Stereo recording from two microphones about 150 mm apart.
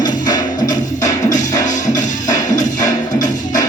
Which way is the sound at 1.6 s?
55° left (ahead or behind).